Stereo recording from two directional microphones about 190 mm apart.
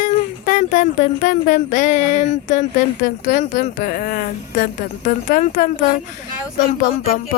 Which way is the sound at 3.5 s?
45° left (ahead or behind).